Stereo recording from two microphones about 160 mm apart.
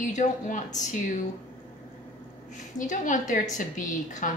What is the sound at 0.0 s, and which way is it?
A woman's voice, 50° left (ahead or behind).